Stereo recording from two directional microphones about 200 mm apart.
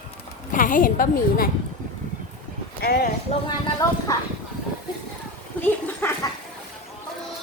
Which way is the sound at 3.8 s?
15° left (ahead or behind).